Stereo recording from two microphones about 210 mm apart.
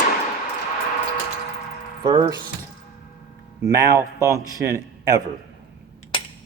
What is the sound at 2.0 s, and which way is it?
Speech, 15° right (ahead or behind).